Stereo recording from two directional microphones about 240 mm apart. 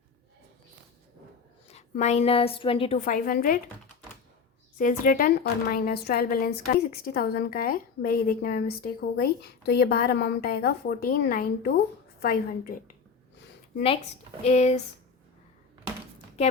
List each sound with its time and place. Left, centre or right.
1.6 s a woman's voice: left
3.0 s a woman's voice: left
4.8 s a woman's voice: left
14.4 s speech: left